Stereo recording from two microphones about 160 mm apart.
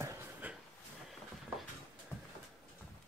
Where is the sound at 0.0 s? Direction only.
15° right (ahead or behind).